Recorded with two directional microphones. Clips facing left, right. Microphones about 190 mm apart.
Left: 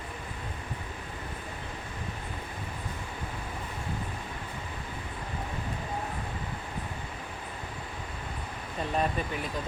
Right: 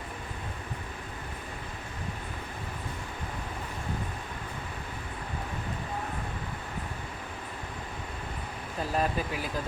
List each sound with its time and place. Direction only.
8.8 s speech: 5° right (ahead or behind)